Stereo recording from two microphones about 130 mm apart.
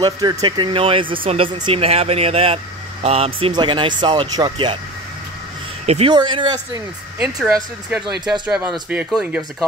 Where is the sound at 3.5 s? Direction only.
40° right (ahead or behind).